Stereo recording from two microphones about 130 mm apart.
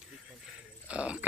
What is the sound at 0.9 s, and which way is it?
Speech, 10° right (ahead or behind).